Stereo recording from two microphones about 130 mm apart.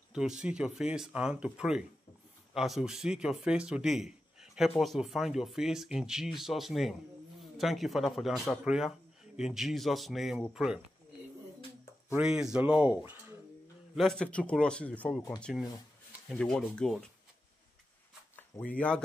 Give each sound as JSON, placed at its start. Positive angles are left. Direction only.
{"t": 0.1, "sound": "a man's voice", "side_deg": -5}
{"t": 12.2, "sound": "speech", "side_deg": -5}
{"t": 13.9, "sound": "a man's voice", "side_deg": 5}
{"t": 15.5, "sound": "a man's voice", "side_deg": 0}
{"t": 18.3, "sound": "a sound", "side_deg": 10}